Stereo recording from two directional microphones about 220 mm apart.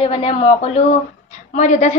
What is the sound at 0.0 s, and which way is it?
Speech, 25° left (ahead or behind).